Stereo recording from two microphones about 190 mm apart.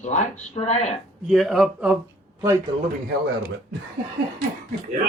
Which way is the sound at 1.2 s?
Centre (ahead or behind).